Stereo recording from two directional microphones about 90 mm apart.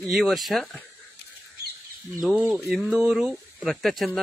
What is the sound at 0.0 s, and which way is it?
Speech, centre (ahead or behind).